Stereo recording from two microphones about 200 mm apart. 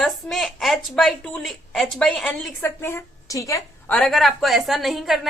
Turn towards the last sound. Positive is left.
turn(degrees=0)  # may be behind; listen again after turning